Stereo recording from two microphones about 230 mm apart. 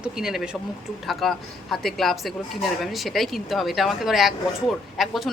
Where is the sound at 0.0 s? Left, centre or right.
Centre.